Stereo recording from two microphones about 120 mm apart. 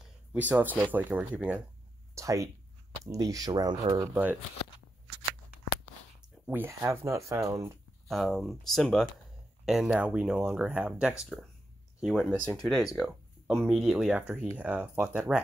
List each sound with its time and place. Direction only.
0.3 s speech: 15° right (ahead or behind)
2.1 s speech: 25° right (ahead or behind)
4.1 s speech: 15° right (ahead or behind)
6.4 s speech: 15° right (ahead or behind)
8.1 s speech: centre (ahead or behind)
9.7 s speech: 5° right (ahead or behind)